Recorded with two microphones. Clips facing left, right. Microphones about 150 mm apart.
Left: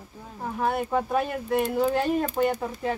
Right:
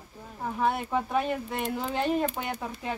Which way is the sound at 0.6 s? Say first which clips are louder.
Left 2 dB; centre (ahead or behind).